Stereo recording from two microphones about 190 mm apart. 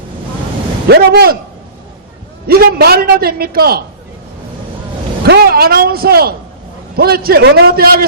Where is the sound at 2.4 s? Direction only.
55° right (ahead or behind).